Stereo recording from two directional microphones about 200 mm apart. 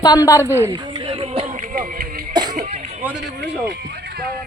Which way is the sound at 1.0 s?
25° right (ahead or behind).